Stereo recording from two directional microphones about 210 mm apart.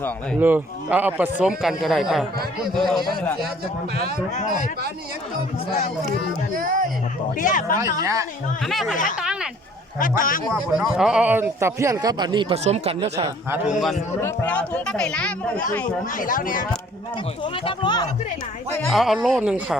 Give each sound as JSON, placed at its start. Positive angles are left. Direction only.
{"t": 0.3, "sound": "a man's voice", "side_deg": -10}
{"t": 4.4, "sound": "speech", "side_deg": 35}
{"t": 6.5, "sound": "speech", "side_deg": -40}
{"t": 7.3, "sound": "speech", "side_deg": 40}
{"t": 8.0, "sound": "a man's voice", "side_deg": -15}
{"t": 8.6, "sound": "speech", "side_deg": 0}
{"t": 9.2, "sound": "a sound", "side_deg": -5}
{"t": 10.0, "sound": "speech", "side_deg": 40}
{"t": 10.8, "sound": "a man's voice", "side_deg": -5}
{"t": 13.1, "sound": "a man's voice", "side_deg": -15}
{"t": 13.7, "sound": "speech", "side_deg": 0}
{"t": 16.1, "sound": "speech", "side_deg": 40}
{"t": 17.4, "sound": "speech", "side_deg": 25}
{"t": 18.9, "sound": "speech", "side_deg": 0}